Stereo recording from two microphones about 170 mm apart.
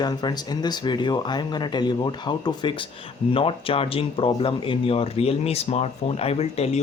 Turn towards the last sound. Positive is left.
turn(degrees=35)  # may be behind; listen again after turning